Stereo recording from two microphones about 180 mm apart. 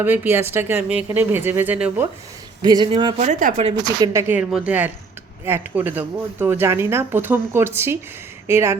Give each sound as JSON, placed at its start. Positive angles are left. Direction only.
{"t": 0.0, "sound": "speech", "side_deg": -10}
{"t": 2.6, "sound": "speech", "side_deg": -25}
{"t": 3.2, "sound": "speech", "side_deg": -40}
{"t": 3.8, "sound": "speech", "side_deg": -15}